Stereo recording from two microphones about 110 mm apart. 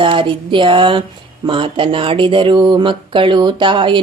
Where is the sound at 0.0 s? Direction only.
50° right (ahead or behind).